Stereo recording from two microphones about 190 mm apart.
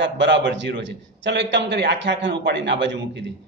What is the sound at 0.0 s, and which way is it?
A man's voice, 65° right (ahead or behind).